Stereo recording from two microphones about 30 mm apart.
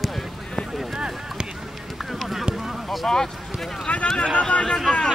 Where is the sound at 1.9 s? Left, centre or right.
Centre.